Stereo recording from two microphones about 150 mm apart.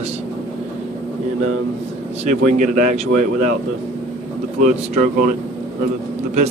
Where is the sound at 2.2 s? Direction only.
55° right (ahead or behind).